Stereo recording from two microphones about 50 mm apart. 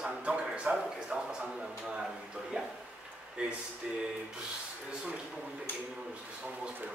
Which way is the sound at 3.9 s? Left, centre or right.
Centre.